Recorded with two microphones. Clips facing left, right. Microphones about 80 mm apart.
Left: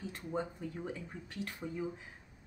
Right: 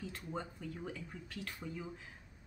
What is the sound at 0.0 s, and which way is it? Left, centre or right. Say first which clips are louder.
Speech: left 5 dB; left.